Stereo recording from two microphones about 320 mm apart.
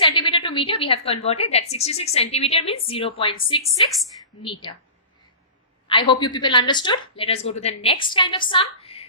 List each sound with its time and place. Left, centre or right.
0.0 s a woman's voice: centre
5.9 s a woman's voice: centre